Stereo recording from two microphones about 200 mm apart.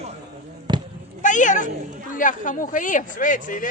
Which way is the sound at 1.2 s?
40° left (ahead or behind).